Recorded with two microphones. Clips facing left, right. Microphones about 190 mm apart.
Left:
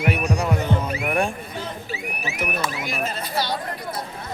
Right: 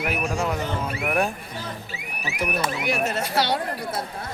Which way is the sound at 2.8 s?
70° right (ahead or behind).